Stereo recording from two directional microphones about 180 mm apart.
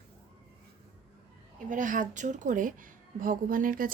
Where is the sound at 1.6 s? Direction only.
45° right (ahead or behind).